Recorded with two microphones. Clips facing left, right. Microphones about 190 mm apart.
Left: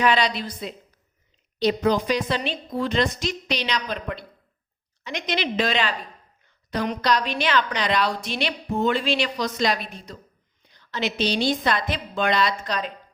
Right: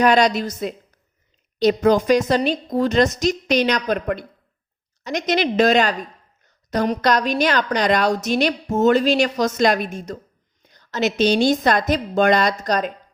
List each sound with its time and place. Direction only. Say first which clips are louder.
0.0 s a woman's voice: right 6 dB; 45° right (ahead or behind)